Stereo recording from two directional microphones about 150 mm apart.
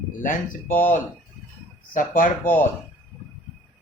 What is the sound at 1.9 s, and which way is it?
Speech, 65° left (ahead or behind).